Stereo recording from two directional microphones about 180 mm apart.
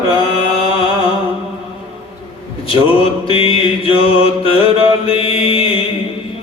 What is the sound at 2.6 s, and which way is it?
Mantra, 30° left (ahead or behind).